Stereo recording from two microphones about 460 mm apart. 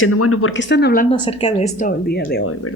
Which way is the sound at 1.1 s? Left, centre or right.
Centre.